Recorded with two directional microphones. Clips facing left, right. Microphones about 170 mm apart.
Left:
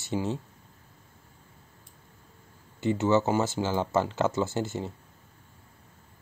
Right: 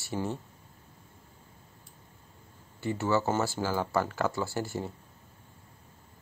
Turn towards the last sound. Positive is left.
turn(degrees=20)  # may be behind; listen again after turning